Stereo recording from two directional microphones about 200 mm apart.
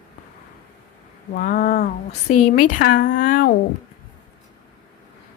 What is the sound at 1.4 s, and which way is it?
A woman's voice, 40° left (ahead or behind).